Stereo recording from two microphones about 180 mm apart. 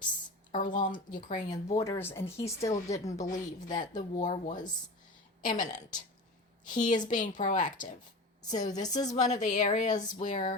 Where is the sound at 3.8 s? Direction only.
45° left (ahead or behind).